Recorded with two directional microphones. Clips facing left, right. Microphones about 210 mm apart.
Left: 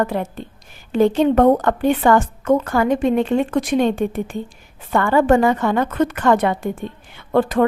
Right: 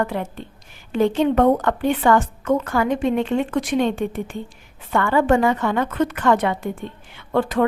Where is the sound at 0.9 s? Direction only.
40° left (ahead or behind).